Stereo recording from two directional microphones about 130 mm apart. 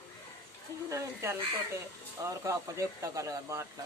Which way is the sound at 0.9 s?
25° right (ahead or behind).